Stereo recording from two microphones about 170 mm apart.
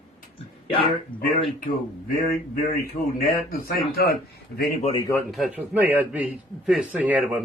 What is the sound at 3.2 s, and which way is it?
Speech, 60° left (ahead or behind).